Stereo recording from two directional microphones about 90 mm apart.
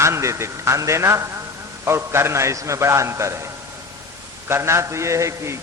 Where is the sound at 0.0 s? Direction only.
30° right (ahead or behind).